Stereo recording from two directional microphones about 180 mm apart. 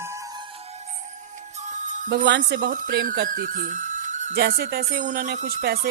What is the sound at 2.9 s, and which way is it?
Speech, 55° right (ahead or behind).